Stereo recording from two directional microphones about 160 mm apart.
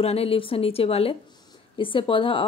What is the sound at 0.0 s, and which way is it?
Speech, 40° left (ahead or behind).